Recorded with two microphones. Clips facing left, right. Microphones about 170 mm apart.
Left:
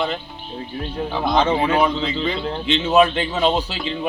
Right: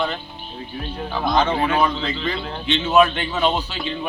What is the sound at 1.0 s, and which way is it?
Speech, 20° left (ahead or behind).